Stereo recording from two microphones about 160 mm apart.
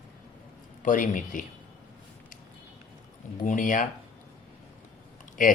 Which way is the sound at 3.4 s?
55° left (ahead or behind).